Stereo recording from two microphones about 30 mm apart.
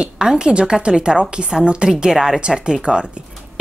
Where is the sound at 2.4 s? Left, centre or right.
Right.